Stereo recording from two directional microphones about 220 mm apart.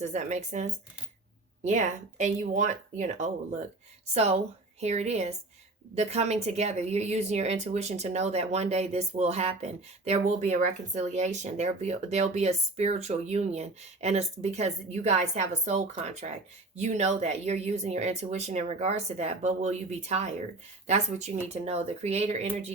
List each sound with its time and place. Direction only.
0.0 s a woman's voice: 30° right (ahead or behind)